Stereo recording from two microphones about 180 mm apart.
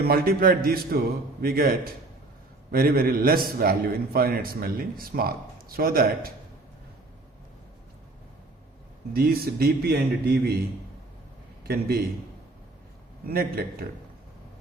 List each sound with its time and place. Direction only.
0.0 s a man's voice: 55° right (ahead or behind)
9.1 s a man's voice: 60° right (ahead or behind)
11.7 s a man's voice: 55° right (ahead or behind)
13.2 s a man's voice: 55° right (ahead or behind)